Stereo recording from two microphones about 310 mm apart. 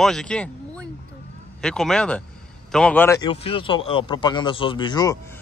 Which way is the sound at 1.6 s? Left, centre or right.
Centre.